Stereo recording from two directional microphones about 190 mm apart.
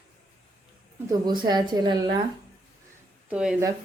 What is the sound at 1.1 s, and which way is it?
Speech, 20° right (ahead or behind).